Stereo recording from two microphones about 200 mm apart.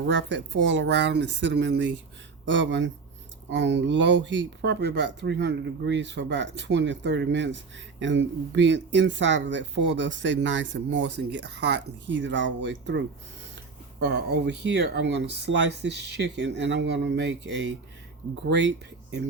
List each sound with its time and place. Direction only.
0.0 s speech: 65° right (ahead or behind)
14.0 s speech: 55° right (ahead or behind)